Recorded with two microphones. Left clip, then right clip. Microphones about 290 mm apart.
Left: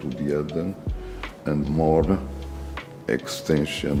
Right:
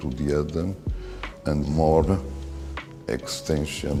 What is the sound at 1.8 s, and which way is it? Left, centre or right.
Speech, right.